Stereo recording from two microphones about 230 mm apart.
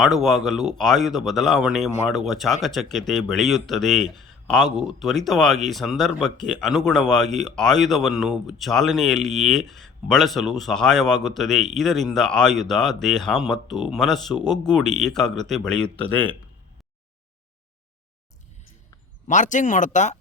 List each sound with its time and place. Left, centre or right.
0.0 s speech: centre
19.3 s speech: left